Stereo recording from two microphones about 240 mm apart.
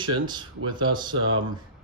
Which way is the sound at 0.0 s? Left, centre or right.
Centre.